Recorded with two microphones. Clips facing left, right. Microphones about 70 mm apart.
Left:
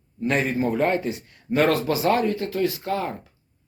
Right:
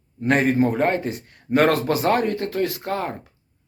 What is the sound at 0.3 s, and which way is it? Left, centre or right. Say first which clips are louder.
Speech: right 4 dB; right.